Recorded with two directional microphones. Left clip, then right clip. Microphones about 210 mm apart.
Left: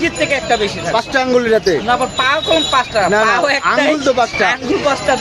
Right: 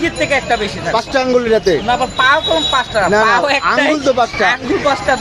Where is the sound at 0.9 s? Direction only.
5° right (ahead or behind).